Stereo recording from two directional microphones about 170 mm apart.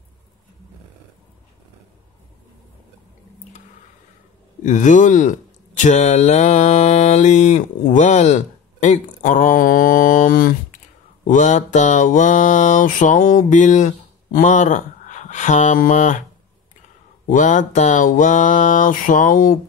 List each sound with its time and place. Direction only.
4.6 s speech: 45° left (ahead or behind)
17.3 s speech: 50° left (ahead or behind)